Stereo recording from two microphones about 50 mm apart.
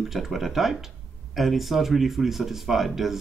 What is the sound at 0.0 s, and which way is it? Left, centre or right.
Speech, centre.